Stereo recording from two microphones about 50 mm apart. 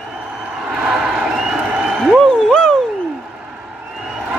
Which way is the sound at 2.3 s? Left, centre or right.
Centre.